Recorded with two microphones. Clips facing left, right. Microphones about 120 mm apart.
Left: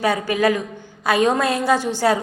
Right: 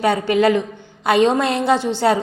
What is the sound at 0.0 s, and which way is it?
A woman's voice, 25° right (ahead or behind).